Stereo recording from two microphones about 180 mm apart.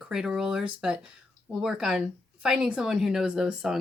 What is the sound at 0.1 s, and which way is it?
Speech, 5° right (ahead or behind).